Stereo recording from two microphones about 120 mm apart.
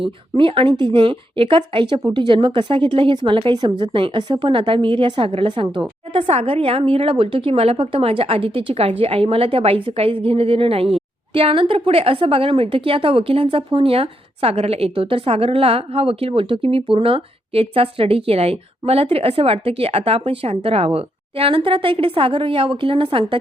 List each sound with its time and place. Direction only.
0.0 s a woman's voice: 45° right (ahead or behind)